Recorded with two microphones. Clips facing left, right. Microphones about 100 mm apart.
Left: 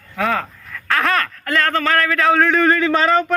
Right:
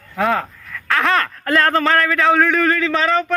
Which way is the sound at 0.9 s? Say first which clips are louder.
Right 1 dB; centre (ahead or behind).